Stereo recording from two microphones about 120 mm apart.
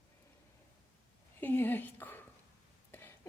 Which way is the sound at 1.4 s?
15° left (ahead or behind).